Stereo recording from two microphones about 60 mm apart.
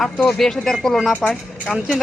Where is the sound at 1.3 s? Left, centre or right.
Centre.